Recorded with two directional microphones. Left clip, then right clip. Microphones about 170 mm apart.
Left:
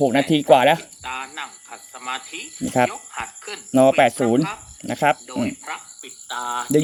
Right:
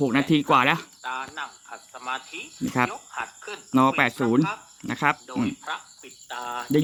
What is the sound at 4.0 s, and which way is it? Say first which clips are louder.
Speech: left 5 dB; 5° left (ahead or behind).